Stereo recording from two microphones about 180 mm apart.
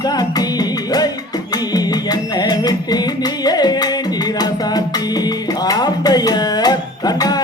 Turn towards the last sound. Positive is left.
turn(degrees=20)  # may be behind; listen again after turning